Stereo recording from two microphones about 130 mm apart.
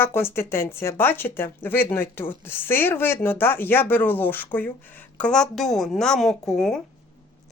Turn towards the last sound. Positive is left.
turn(degrees=5)  # may be behind; listen again after turning